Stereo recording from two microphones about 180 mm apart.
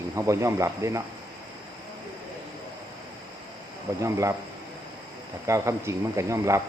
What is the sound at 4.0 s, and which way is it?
Speech, 15° right (ahead or behind).